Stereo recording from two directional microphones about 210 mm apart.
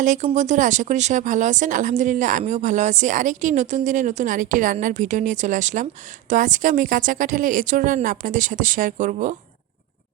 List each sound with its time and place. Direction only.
0.0 s speech: 35° right (ahead or behind)